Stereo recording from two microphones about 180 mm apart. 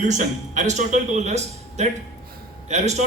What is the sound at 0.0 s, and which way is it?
A man's voice, 40° right (ahead or behind).